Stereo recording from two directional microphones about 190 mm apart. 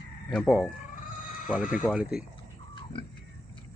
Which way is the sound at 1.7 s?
5° right (ahead or behind).